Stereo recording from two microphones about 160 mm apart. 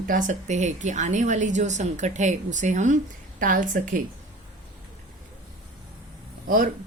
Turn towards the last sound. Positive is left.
turn(degrees=-60)  # may be behind; listen again after turning